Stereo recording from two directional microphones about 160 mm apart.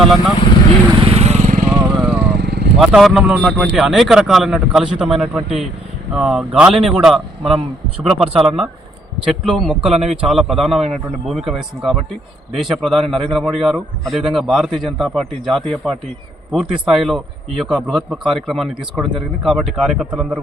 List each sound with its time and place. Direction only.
0.9 s vehicle: 35° right (ahead or behind)
2.0 s vehicle: 10° right (ahead or behind)
2.4 s vehicle: 90° right
2.7 s a man's voice: centre (ahead or behind)
9.9 s a man's voice: 45° right (ahead or behind)
10.2 s a man's voice: 5° right (ahead or behind)